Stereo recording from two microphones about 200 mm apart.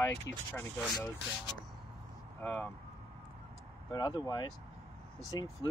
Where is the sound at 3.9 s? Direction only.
20° left (ahead or behind).